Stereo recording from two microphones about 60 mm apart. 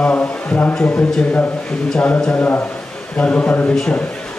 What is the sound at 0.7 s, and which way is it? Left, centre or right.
A man's voice, centre.